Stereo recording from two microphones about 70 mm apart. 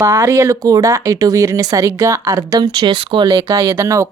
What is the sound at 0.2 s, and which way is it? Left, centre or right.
Speech, right.